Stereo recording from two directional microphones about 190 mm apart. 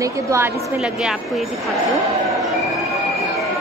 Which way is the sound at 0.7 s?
5° right (ahead or behind).